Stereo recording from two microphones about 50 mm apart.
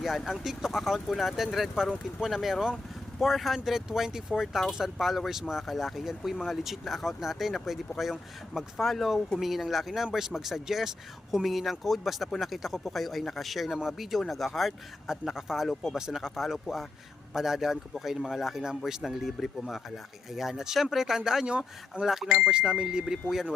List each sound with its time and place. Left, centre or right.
0.3 s speech: centre
22.4 s speech: centre